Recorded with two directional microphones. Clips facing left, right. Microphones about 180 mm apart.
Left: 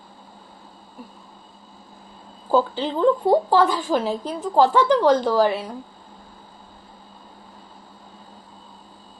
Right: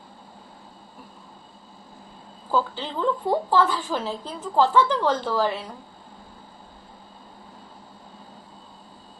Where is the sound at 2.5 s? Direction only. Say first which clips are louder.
Left 6 dB; 15° left (ahead or behind).